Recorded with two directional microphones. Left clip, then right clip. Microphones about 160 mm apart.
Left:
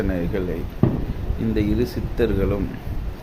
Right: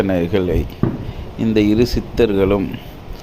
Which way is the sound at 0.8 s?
15° left (ahead or behind).